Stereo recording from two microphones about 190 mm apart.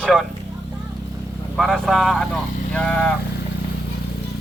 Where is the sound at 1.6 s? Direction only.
Centre (ahead or behind).